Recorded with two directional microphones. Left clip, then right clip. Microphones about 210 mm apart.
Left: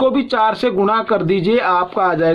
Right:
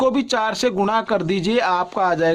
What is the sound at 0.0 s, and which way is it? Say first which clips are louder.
Speech: left 4 dB; 40° right (ahead or behind).